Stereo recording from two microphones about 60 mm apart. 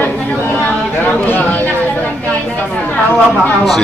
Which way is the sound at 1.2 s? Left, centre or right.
Left.